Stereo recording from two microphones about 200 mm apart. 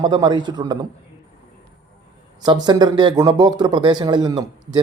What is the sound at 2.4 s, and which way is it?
Speech, 20° right (ahead or behind).